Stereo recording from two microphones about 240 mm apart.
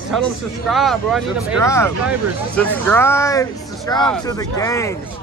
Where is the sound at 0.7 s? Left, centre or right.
Centre.